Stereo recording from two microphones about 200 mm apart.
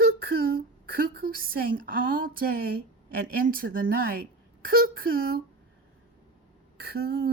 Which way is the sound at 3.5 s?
45° right (ahead or behind).